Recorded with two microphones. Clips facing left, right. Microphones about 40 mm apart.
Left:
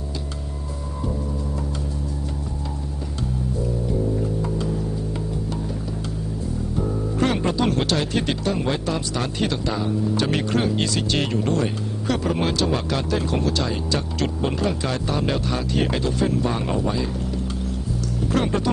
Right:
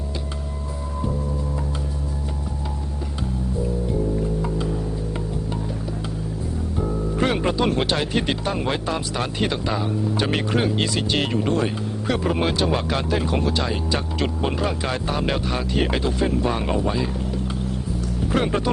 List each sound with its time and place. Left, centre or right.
4.4 s music: centre
7.2 s speech: centre
18.3 s speech: centre